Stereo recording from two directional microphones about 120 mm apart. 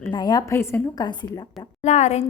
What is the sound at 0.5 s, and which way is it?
Speech, 20° left (ahead or behind).